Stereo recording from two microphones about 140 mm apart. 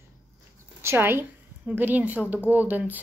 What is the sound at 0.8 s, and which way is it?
Speech, 15° right (ahead or behind).